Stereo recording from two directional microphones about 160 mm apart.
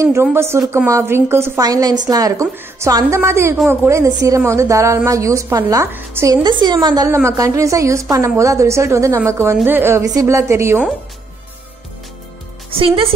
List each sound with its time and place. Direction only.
0.0 s a woman's voice: 15° right (ahead or behind)
12.7 s a woman's voice: 35° right (ahead or behind)